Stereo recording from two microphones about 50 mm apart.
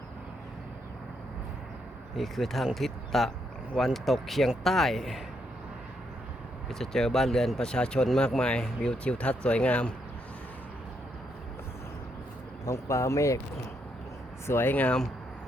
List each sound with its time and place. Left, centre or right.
2.1 s speech: centre
6.7 s speech: centre
7.6 s speech: centre
12.6 s speech: left
14.4 s speech: left